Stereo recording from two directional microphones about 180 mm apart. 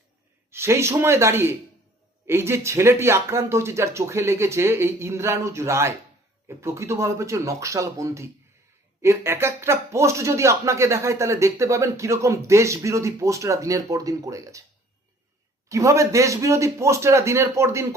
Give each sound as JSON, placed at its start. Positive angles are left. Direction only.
{"t": 0.5, "sound": "speech", "side_deg": -15}
{"t": 15.7, "sound": "speech", "side_deg": -15}